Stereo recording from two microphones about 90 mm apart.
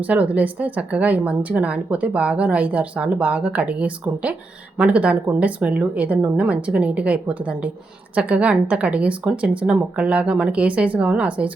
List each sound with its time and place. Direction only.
0.0 s speech: 15° right (ahead or behind)